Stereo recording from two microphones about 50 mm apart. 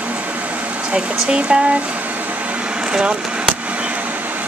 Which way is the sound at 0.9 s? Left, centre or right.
Centre.